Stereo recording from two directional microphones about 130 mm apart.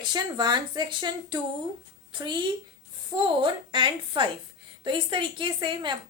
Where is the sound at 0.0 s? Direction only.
35° right (ahead or behind).